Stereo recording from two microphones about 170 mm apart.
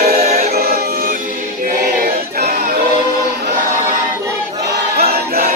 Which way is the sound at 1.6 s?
65° right (ahead or behind).